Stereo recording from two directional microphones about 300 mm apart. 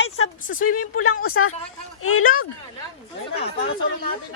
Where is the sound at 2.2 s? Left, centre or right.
Left.